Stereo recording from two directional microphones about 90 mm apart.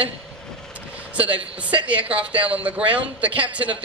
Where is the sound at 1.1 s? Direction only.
15° right (ahead or behind).